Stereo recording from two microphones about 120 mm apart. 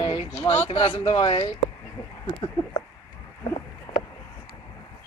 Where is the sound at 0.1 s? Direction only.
55° left (ahead or behind).